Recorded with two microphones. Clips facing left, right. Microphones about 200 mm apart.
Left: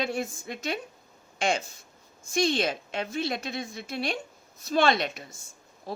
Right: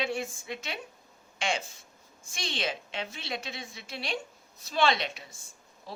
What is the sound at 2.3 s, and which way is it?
A woman's voice, 45° left (ahead or behind).